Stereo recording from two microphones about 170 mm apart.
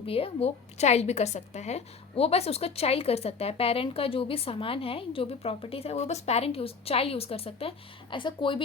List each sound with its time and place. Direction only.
0.0 s a woman's voice: 35° left (ahead or behind)